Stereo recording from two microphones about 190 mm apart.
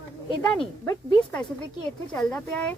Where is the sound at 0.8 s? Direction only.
15° left (ahead or behind).